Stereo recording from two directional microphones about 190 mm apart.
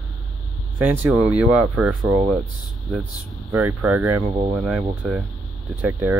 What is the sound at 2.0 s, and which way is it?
Speech, 20° right (ahead or behind).